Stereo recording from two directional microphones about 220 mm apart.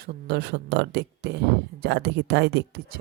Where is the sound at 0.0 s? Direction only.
45° right (ahead or behind).